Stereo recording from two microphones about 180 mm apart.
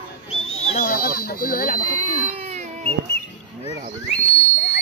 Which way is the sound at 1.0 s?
55° left (ahead or behind).